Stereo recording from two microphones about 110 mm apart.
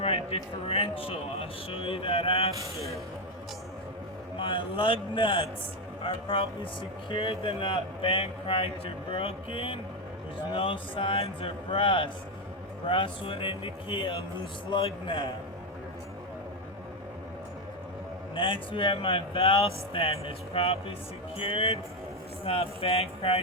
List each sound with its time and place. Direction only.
0.0 s a man's voice: 60° left (ahead or behind)
4.4 s a man's voice: 50° left (ahead or behind)
18.3 s a man's voice: 50° left (ahead or behind)